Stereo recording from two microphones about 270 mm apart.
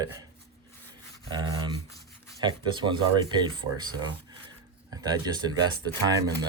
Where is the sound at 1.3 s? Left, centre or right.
Centre.